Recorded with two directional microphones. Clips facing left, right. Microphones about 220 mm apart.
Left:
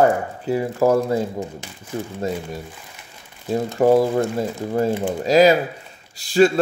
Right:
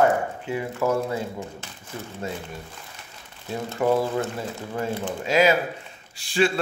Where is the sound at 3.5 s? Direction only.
40° left (ahead or behind).